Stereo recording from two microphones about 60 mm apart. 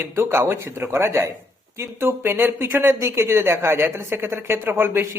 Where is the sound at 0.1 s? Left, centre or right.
Right.